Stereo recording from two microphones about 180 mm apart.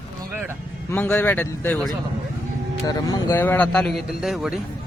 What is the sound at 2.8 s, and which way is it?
Speech, 20° left (ahead or behind).